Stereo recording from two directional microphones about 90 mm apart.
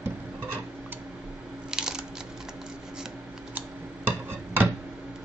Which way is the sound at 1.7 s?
5° right (ahead or behind).